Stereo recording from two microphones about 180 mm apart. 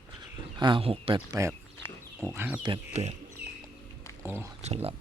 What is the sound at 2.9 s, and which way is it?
Speech, 40° right (ahead or behind).